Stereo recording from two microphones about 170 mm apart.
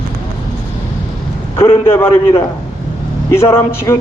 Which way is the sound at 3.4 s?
15° left (ahead or behind).